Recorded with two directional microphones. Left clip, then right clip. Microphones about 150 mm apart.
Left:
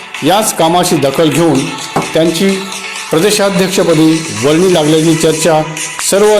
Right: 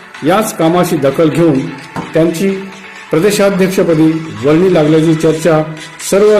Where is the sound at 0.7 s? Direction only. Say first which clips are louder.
Left 2 dB; centre (ahead or behind).